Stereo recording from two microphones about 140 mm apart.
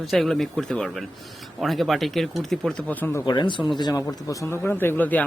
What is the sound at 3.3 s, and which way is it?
A man's voice, 35° left (ahead or behind).